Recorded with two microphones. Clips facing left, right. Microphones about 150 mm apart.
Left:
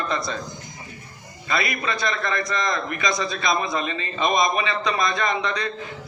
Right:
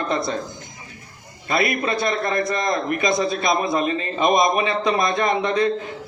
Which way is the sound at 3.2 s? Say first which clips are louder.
Right 4 dB; 50° right (ahead or behind).